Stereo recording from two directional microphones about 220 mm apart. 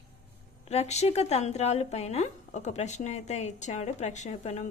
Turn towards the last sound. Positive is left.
turn(degrees=30)  # may be behind; listen again after turning